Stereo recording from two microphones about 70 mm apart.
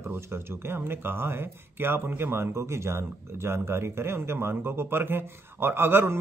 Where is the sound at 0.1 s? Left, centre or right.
Right.